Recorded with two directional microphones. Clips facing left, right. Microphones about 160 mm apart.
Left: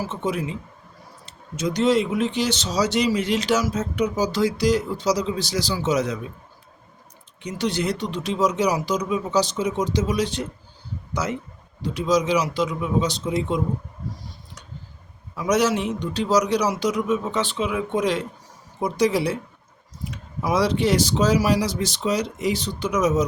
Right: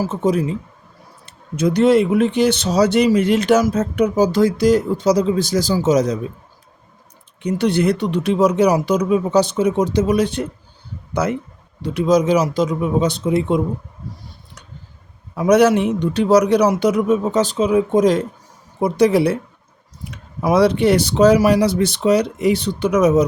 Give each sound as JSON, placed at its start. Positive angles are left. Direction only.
{"t": 0.0, "sound": "speech", "side_deg": -40}
{"t": 1.2, "sound": "speech", "side_deg": -55}
{"t": 7.4, "sound": "a man's voice", "side_deg": -60}
{"t": 15.4, "sound": "speech", "side_deg": -60}
{"t": 18.8, "sound": "speech", "side_deg": -60}